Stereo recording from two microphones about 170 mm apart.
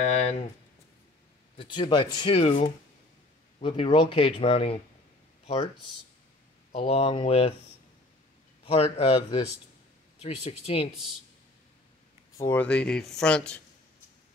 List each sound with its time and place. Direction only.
0.0 s speech: 40° left (ahead or behind)
1.6 s speech: 25° left (ahead or behind)
6.7 s speech: 35° left (ahead or behind)
8.6 s speech: 35° left (ahead or behind)
12.4 s speech: 15° left (ahead or behind)